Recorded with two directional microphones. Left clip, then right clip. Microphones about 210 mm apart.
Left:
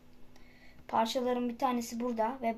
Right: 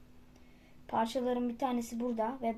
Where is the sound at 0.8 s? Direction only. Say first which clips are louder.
Left 2 dB; 10° right (ahead or behind).